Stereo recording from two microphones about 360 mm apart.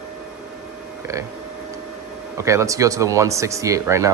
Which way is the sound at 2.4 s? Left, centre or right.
Centre.